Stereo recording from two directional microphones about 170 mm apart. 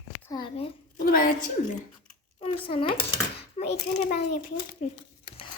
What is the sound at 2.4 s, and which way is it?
A child's voice, 35° left (ahead or behind).